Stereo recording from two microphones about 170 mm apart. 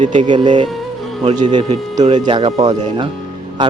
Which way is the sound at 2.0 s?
25° right (ahead or behind).